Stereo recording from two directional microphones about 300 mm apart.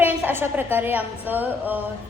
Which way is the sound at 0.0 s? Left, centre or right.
Centre.